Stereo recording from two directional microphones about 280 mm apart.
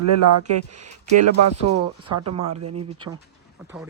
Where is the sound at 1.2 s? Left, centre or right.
Right.